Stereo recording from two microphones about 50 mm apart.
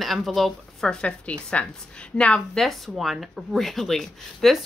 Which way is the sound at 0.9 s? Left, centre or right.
Centre.